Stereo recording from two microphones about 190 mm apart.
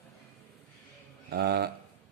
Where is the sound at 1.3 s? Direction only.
55° right (ahead or behind).